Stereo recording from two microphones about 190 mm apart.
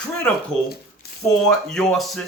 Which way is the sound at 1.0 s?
55° left (ahead or behind).